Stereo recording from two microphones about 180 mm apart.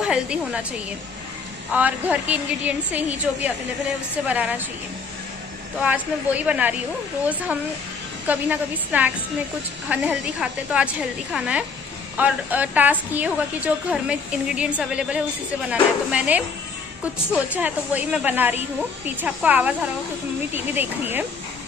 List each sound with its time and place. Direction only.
0.0 s a woman's voice: 5° right (ahead or behind)
1.7 s a woman's voice: 10° right (ahead or behind)
5.8 s a woman's voice: 10° right (ahead or behind)
8.3 s a woman's voice: 10° right (ahead or behind)
17.5 s a woman's voice: 10° right (ahead or behind)